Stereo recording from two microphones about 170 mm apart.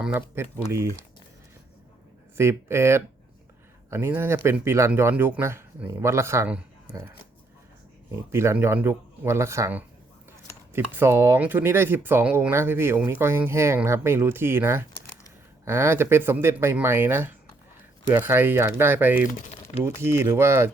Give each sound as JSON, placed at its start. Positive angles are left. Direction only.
{"t": 0.0, "sound": "speech", "side_deg": -10}
{"t": 2.4, "sound": "speech", "side_deg": -15}
{"t": 8.1, "sound": "speech", "side_deg": -15}